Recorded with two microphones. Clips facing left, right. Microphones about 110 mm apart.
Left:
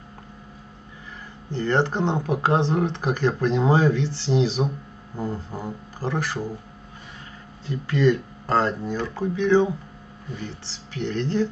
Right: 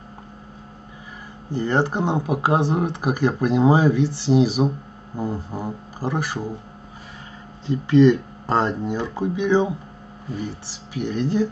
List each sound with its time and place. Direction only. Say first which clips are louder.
1.5 s speech: right 1 dB; 15° right (ahead or behind)
7.6 s speech: right 6 dB; 20° right (ahead or behind)